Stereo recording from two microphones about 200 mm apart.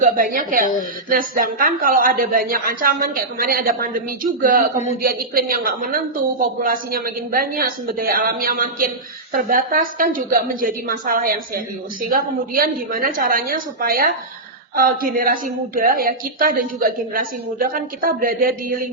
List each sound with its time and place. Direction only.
0.0 s a woman's voice: 45° right (ahead or behind)